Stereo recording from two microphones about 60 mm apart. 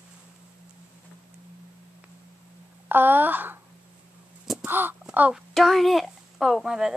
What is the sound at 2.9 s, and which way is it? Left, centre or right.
Speech, right.